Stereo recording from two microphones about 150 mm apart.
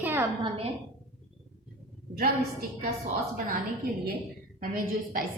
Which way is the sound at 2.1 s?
80° right.